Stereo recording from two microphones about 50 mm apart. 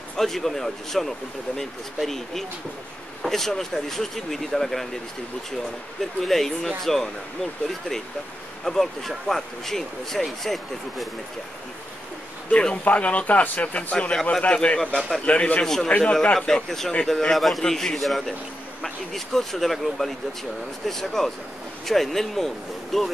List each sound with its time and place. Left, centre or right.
0.2 s a man's voice: centre
6.2 s speech: centre
8.6 s speech: centre
12.8 s speech: left
13.9 s a man's voice: centre
15.0 s speech: centre
15.2 s speech: left
15.6 s a man's voice: centre